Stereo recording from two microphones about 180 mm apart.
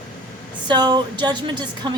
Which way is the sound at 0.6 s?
25° right (ahead or behind).